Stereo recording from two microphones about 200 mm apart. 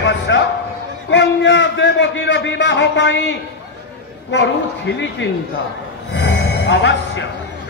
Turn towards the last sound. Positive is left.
turn(degrees=65)  # may be behind; listen again after turning